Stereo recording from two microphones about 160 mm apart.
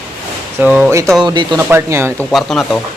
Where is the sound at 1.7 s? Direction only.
15° right (ahead or behind).